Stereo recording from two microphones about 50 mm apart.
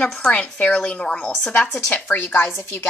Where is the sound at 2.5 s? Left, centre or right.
Left.